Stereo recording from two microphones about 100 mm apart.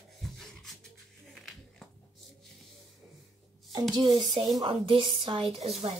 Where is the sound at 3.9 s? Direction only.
45° right (ahead or behind); by 5.7 s 70° right (ahead or behind).